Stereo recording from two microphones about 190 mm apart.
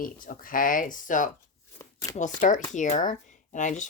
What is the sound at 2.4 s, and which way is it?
A woman's voice, 40° left (ahead or behind).